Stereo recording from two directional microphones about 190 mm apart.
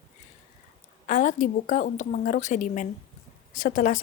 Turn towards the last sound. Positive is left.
turn(degrees=45)  # may be behind; listen again after turning